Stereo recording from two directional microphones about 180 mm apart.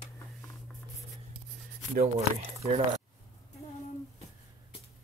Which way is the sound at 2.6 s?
40° right (ahead or behind).